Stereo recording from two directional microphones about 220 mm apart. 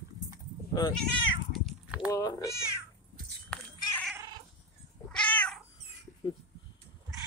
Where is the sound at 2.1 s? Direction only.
15° left (ahead or behind).